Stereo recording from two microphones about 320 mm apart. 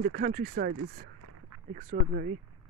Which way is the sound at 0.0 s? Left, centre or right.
Right.